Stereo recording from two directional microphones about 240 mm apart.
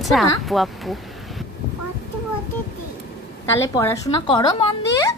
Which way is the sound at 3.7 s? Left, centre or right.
Centre.